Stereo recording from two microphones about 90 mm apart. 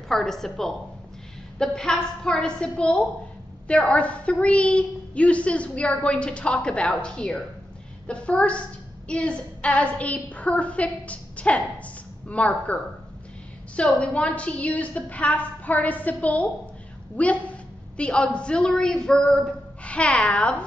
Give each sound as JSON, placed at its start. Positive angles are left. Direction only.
{"t": 0.1, "sound": "a woman's voice", "side_deg": 5}
{"t": 13.7, "sound": "a woman's voice", "side_deg": 10}